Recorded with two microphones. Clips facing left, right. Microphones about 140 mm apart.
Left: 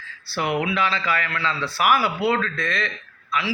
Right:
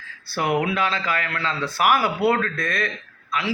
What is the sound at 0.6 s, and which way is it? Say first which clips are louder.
A man's voice: even; 50° right (ahead or behind).